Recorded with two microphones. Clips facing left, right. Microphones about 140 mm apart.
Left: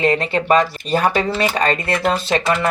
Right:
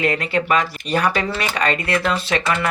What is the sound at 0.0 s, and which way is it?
Speech, 30° left (ahead or behind).